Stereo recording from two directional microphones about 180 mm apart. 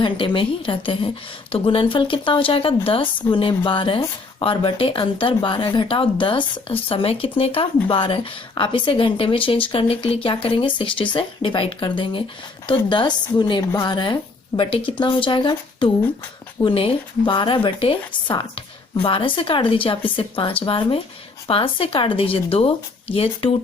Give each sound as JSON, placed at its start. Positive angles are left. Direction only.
{"t": 0.0, "sound": "a woman's voice", "side_deg": 30}